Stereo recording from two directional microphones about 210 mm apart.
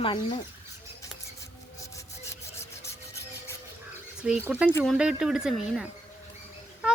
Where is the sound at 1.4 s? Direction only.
15° left (ahead or behind).